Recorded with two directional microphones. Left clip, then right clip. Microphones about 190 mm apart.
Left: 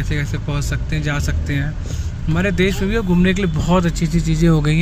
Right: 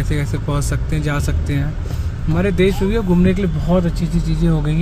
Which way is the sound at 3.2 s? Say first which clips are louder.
Even; 5° left (ahead or behind).